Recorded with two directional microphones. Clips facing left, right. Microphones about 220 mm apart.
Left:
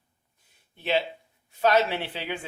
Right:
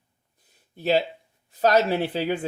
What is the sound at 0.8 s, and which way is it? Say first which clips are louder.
Speech: right 4 dB; 40° right (ahead or behind).